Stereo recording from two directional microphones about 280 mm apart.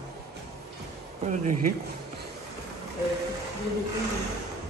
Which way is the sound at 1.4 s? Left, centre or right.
Right.